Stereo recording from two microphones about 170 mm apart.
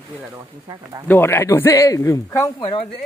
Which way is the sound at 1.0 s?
10° left (ahead or behind).